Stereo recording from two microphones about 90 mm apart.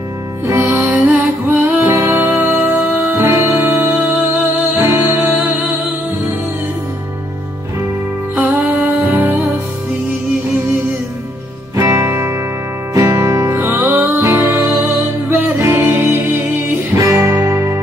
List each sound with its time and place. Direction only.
0.5 s music: 25° right (ahead or behind)
1.9 s music: 30° right (ahead or behind)
8.4 s music: 20° right (ahead or behind)
11.7 s music: 35° right (ahead or behind)
13.6 s music: 25° right (ahead or behind)
16.9 s music: 35° right (ahead or behind)